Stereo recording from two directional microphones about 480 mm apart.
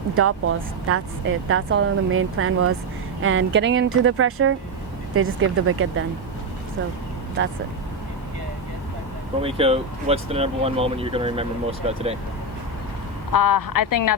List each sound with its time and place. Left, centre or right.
0.2 s speech: right
9.4 s speech: centre
13.3 s speech: left